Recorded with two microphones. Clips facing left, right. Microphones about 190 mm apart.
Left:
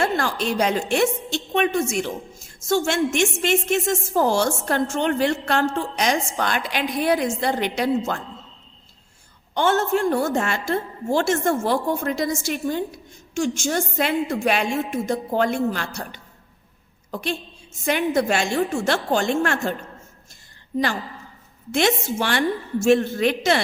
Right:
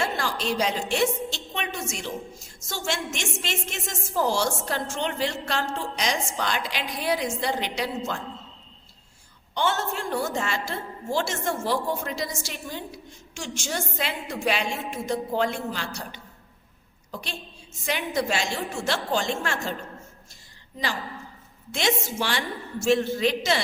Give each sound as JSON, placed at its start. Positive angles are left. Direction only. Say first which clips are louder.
{"t": 0.0, "sound": "a woman's voice", "louder": "left 5 dB", "side_deg": 55}
{"t": 9.6, "sound": "a woman's voice", "louder": "left 7 dB", "side_deg": 50}
{"t": 21.7, "sound": "a woman's voice", "louder": "left 6 dB", "side_deg": 55}